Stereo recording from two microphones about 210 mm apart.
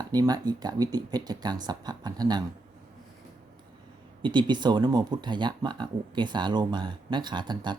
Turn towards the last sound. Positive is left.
turn(degrees=-20)  # may be behind; listen again after turning